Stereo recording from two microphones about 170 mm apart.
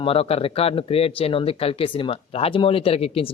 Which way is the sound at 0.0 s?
35° left (ahead or behind).